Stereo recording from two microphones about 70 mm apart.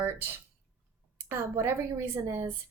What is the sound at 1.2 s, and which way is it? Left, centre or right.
A woman's voice, right.